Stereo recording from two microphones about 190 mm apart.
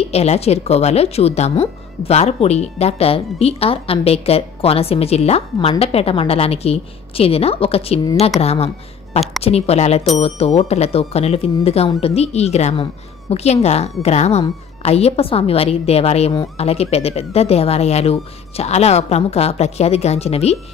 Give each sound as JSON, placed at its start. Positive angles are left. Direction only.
{"t": 0.1, "sound": "speech", "side_deg": 35}